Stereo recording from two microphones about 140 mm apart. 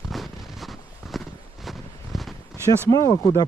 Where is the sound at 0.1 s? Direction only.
Centre (ahead or behind).